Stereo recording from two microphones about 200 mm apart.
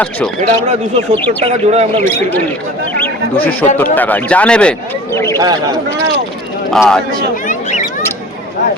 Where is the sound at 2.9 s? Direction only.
10° left (ahead or behind).